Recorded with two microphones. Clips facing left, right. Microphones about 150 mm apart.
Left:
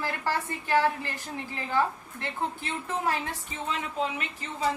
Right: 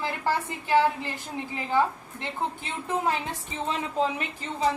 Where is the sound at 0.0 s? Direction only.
15° right (ahead or behind).